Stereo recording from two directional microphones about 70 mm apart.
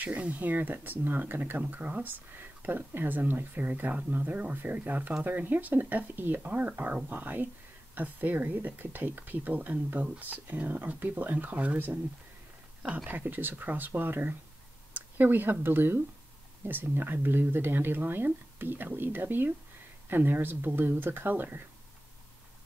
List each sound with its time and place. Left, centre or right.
0.0 s speech: right
12.8 s speech: right